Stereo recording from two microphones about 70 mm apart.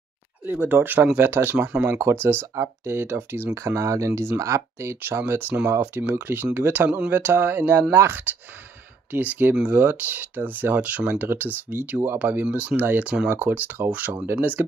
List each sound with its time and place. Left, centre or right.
0.5 s speech: right
3.5 s speech: right
9.1 s speech: right
11.1 s speech: right